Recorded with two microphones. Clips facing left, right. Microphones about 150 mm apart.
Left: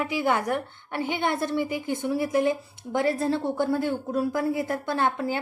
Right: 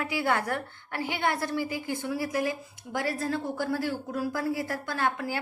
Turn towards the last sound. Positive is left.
turn(degrees=25)  # may be behind; listen again after turning